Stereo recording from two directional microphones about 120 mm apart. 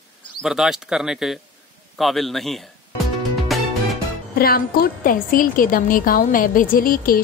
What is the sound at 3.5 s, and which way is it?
Music, centre (ahead or behind).